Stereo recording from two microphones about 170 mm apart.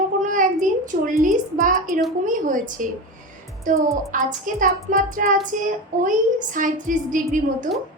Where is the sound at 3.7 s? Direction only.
50° right (ahead or behind).